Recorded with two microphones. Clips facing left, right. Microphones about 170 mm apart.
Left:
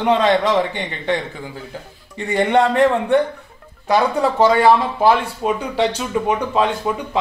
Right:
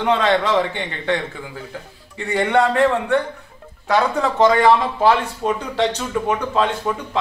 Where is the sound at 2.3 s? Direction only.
20° left (ahead or behind).